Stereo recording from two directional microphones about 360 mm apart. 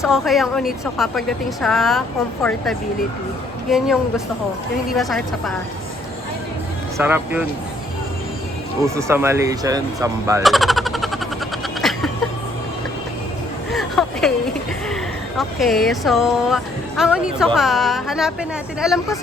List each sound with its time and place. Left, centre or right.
0.0 s a woman's voice: centre
3.7 s a woman's voice: centre
6.9 s a woman's voice: centre
8.8 s speech: centre
11.8 s a sound: centre
13.7 s a sound: centre
15.4 s a woman's voice: centre